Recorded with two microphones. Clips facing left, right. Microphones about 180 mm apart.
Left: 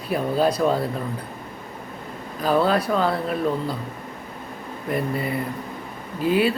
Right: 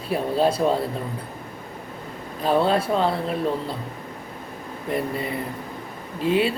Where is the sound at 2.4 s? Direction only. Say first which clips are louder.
Even; 25° right (ahead or behind).